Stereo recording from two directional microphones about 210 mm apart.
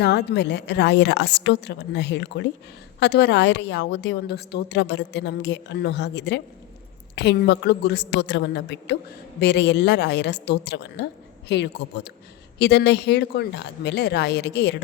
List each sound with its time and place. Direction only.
0.0 s a woman's voice: 55° left (ahead or behind)